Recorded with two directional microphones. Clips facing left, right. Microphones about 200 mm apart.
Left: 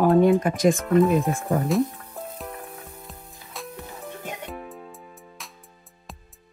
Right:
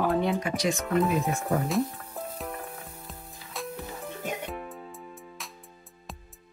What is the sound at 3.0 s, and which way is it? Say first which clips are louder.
Music: left 1 dB; centre (ahead or behind).